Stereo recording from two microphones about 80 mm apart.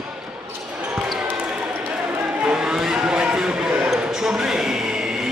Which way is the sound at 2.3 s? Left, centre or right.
Centre.